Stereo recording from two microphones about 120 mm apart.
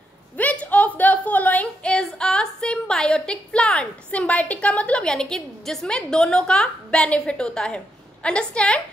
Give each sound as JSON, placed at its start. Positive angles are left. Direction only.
{"t": 0.4, "sound": "a woman's voice", "side_deg": 10}